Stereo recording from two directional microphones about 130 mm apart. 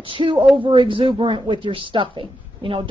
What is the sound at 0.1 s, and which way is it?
A woman's voice, 40° right (ahead or behind).